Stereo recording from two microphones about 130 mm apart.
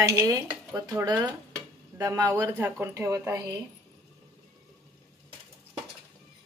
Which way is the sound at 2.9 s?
25° right (ahead or behind).